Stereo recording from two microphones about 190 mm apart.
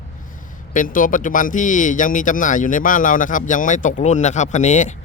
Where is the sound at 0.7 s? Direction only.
45° left (ahead or behind).